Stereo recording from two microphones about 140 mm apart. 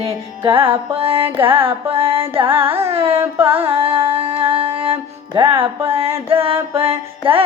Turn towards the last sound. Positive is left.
turn(degrees=-40)  # may be behind; listen again after turning